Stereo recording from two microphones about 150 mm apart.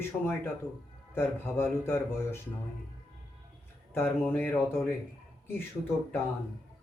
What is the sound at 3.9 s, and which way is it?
Speech, 15° left (ahead or behind).